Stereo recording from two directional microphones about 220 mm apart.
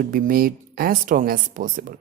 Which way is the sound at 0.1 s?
40° right (ahead or behind).